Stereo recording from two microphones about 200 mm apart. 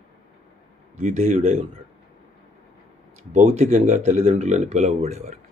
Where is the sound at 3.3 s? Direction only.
35° right (ahead or behind).